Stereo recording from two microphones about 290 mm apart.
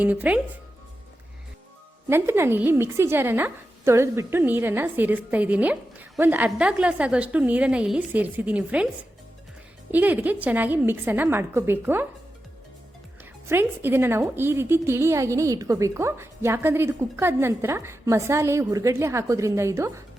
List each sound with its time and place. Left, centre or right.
0.0 s a woman's voice: centre
2.0 s a woman's voice: centre
9.9 s a woman's voice: centre
13.5 s a woman's voice: centre